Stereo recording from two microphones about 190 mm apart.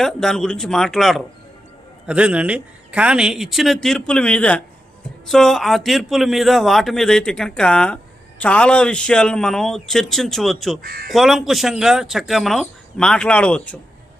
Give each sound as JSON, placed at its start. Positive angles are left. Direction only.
{"t": 0.0, "sound": "a man's voice", "side_deg": 0}
{"t": 10.8, "sound": "speech", "side_deg": -50}
{"t": 11.1, "sound": "a man's voice", "side_deg": 0}